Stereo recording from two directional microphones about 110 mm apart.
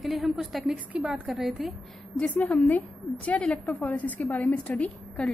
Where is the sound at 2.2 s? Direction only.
10° left (ahead or behind).